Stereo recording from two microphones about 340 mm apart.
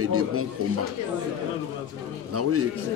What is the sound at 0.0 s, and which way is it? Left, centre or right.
Speech, right.